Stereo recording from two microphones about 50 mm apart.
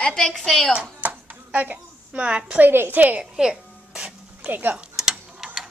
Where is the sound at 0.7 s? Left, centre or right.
Right.